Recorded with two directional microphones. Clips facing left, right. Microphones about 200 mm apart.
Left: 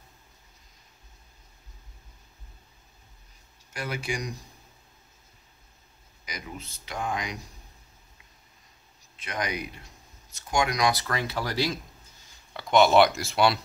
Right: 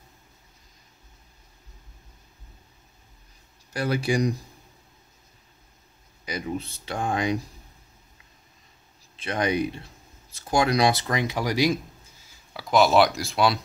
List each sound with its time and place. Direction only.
3.7 s speech: 35° right (ahead or behind)
6.2 s speech: 30° right (ahead or behind)
9.2 s speech: 30° right (ahead or behind)
12.5 s speech: centre (ahead or behind)